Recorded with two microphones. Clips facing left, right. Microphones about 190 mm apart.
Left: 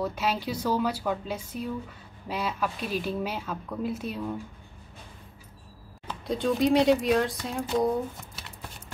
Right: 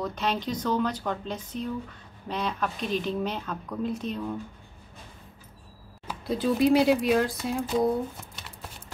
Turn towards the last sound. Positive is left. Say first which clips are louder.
# right 1 dB
turn(degrees=0)  # may be behind; listen again after turning